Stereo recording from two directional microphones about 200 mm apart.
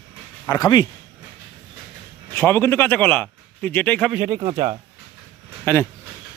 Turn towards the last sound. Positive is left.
turn(degrees=10)  # may be behind; listen again after turning